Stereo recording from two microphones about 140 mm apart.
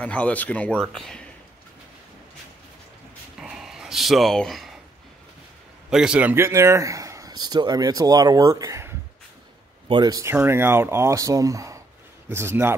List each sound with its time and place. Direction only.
0.0 s speech: 10° left (ahead or behind)
3.3 s a sound: 5° right (ahead or behind)
5.9 s speech: 5° right (ahead or behind); by 10.3 s 25° right (ahead or behind)
10.3 s a man's voice: 15° right (ahead or behind)